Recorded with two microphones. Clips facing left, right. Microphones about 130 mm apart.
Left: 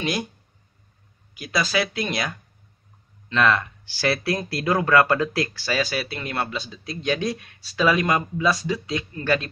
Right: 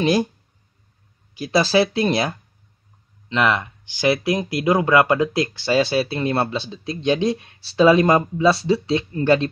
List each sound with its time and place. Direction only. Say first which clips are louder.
0.0 s speech: right 8 dB; 30° right (ahead or behind)
1.3 s speech: right 7 dB; 30° right (ahead or behind)
3.3 s speech: right 1 dB; 20° right (ahead or behind)